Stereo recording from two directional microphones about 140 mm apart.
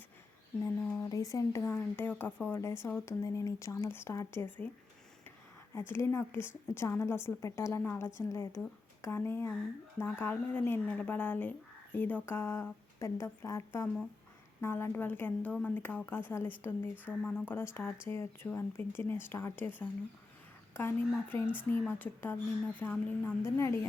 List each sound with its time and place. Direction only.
0.6 s a woman's voice: 15° left (ahead or behind)
5.7 s a woman's voice: 20° left (ahead or behind)